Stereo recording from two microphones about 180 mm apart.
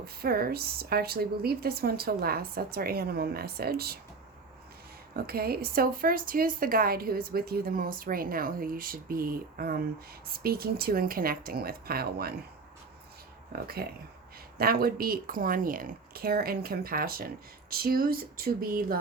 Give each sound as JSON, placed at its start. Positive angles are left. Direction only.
{"t": 0.0, "sound": "a woman's voice", "side_deg": -60}
{"t": 5.1, "sound": "a woman's voice", "side_deg": -55}
{"t": 13.5, "sound": "a woman's voice", "side_deg": -60}